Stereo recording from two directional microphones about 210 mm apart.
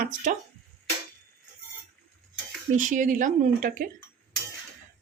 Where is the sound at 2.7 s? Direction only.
40° right (ahead or behind).